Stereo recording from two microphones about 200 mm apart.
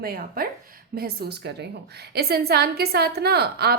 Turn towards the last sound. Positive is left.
turn(degrees=-55)  # may be behind; listen again after turning